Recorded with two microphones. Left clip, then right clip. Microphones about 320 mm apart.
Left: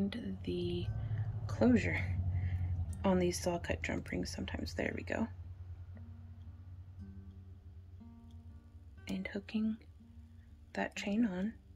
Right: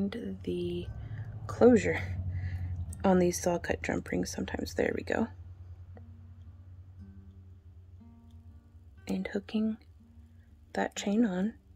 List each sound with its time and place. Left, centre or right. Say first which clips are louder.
0.0 s music: right 4 dB; centre
1.4 s a sound: right 9 dB; centre
3.0 s a woman's voice: right 6 dB; centre
7.0 s music: even; centre
9.2 s speech: right 5 dB; centre